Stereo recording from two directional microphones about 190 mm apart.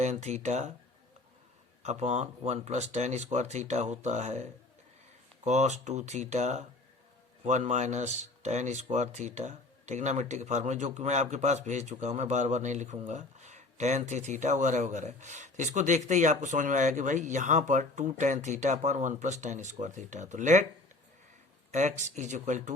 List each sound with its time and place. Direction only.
0.0 s speech: 35° right (ahead or behind)
1.8 s speech: 35° right (ahead or behind)
5.5 s speech: 35° right (ahead or behind)
21.7 s speech: 40° right (ahead or behind)